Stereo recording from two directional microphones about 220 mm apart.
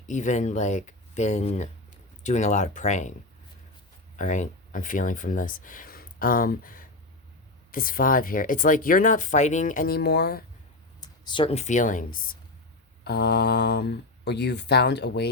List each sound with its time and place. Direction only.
0.1 s speech: 35° left (ahead or behind)
4.2 s speech: 35° left (ahead or behind)
11.0 s speech: 20° left (ahead or behind); by 12.4 s 40° left (ahead or behind)
13.1 s speech: 50° left (ahead or behind)